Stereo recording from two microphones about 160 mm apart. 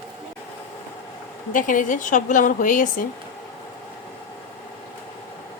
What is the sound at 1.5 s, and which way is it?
Speech, 55° left (ahead or behind).